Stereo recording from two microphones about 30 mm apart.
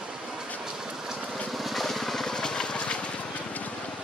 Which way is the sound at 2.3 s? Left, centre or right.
Left.